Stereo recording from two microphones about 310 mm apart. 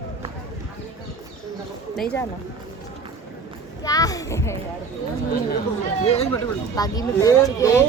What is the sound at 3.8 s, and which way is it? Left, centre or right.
Speech, centre.